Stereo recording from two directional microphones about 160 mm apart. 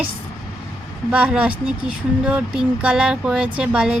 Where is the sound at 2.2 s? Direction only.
5° right (ahead or behind).